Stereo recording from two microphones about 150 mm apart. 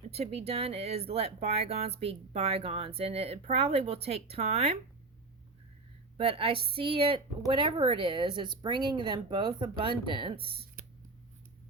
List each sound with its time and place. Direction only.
0.1 s speech: 45° right (ahead or behind)
6.1 s speech: 40° right (ahead or behind)